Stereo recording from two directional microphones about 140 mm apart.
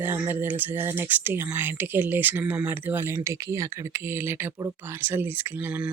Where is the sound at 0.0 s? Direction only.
15° right (ahead or behind).